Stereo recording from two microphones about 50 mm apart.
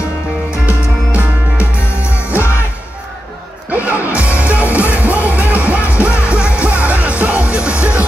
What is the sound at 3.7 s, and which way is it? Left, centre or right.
Music, right.